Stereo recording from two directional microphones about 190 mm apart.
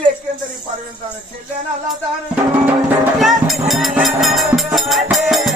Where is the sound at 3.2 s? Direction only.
Centre (ahead or behind).